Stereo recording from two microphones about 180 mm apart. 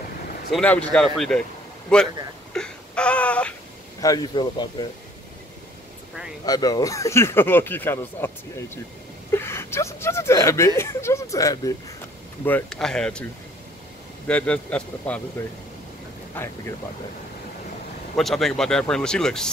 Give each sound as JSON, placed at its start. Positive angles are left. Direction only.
{"t": 0.5, "sound": "speech", "side_deg": 5}
{"t": 2.5, "sound": "a sound", "side_deg": 5}
{"t": 4.0, "sound": "speech", "side_deg": 20}
{"t": 6.4, "sound": "speech", "side_deg": 20}
{"t": 12.4, "sound": "speech", "side_deg": 5}
{"t": 14.2, "sound": "speech", "side_deg": 5}
{"t": 18.1, "sound": "speech", "side_deg": 0}